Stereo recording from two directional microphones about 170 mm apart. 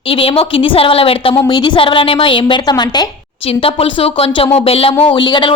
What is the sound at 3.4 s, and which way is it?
A woman's voice, 35° left (ahead or behind).